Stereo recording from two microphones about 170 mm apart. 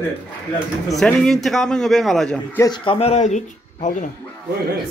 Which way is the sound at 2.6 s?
30° left (ahead or behind).